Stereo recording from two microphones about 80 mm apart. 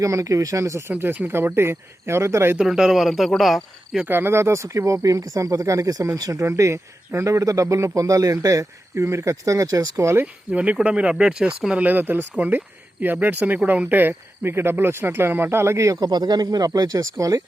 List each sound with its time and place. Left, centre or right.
0.0 s a man's voice: right
2.6 s speech: centre
4.0 s a man's voice: right
6.4 s a man's voice: right
10.5 s speech: centre; by 16.0 s right
16.0 s speech: right